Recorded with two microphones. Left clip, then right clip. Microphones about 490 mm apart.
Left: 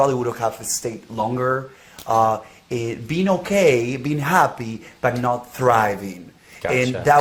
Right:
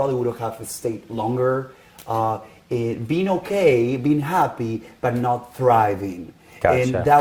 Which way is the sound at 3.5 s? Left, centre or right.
Right.